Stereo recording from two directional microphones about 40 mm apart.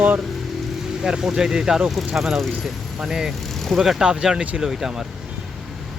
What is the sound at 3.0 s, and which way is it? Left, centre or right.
Speech, centre.